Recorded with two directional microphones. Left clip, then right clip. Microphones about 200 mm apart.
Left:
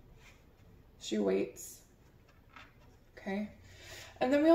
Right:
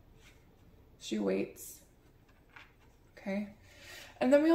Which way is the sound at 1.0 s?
40° right (ahead or behind).